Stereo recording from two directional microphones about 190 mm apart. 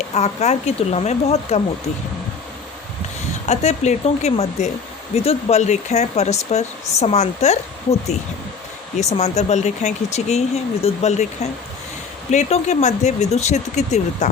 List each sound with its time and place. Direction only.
0.1 s speech: 35° left (ahead or behind)
3.4 s speech: 35° left (ahead or behind)
9.0 s speech: 35° left (ahead or behind)
12.3 s speech: 40° left (ahead or behind)